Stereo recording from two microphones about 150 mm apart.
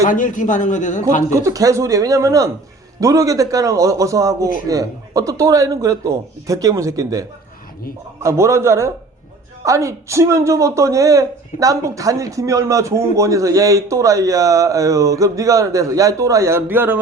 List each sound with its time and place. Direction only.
0.1 s a man's voice: 60° left (ahead or behind)
1.3 s a man's voice: 20° right (ahead or behind)